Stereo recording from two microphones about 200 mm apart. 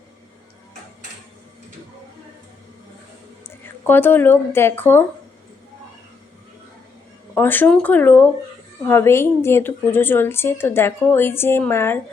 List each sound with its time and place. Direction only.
3.8 s speech: 10° left (ahead or behind)
7.3 s speech: 10° left (ahead or behind)